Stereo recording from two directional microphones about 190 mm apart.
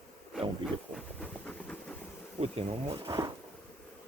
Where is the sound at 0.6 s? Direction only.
5° left (ahead or behind).